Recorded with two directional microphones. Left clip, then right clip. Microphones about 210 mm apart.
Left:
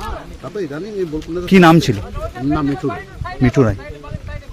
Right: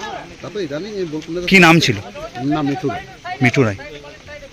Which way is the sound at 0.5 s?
5° left (ahead or behind).